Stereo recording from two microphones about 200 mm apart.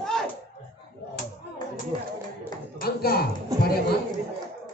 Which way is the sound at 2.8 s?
50° left (ahead or behind).